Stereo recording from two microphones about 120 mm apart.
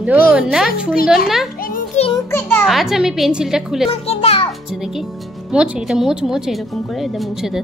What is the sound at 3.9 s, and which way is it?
Music, 55° left (ahead or behind).